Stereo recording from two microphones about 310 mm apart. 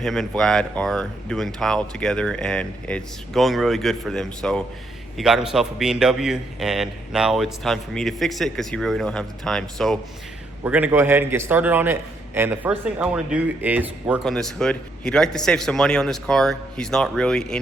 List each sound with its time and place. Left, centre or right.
0.0 s a man's voice: centre